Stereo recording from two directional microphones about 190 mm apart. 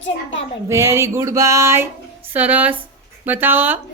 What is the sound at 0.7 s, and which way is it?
A woman's voice, 15° right (ahead or behind).